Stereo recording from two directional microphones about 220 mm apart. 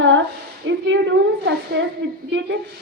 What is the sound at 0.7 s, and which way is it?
A woman's voice, 55° right (ahead or behind).